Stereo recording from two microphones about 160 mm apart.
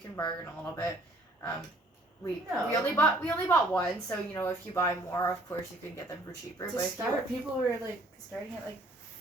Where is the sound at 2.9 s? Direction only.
10° left (ahead or behind).